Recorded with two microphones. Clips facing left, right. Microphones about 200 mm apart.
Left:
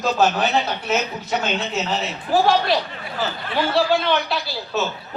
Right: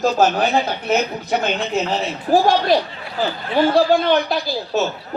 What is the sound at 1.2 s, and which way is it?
Speech, 55° right (ahead or behind).